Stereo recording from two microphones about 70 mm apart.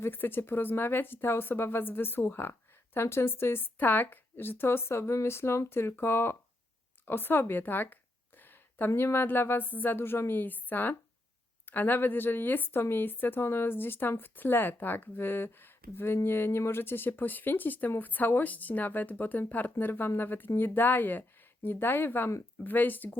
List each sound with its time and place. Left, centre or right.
0.0 s speech: left
8.4 s a sound: left
9.0 s speech: left